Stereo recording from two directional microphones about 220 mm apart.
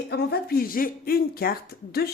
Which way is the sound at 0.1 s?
45° left (ahead or behind).